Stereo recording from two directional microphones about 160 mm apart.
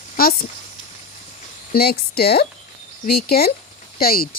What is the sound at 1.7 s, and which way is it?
Speech, 75° left (ahead or behind).